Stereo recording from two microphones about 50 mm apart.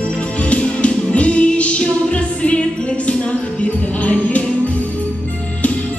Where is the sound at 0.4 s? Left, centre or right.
Left.